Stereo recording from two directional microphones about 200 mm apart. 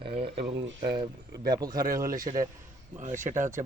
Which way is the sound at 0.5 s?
55° right (ahead or behind).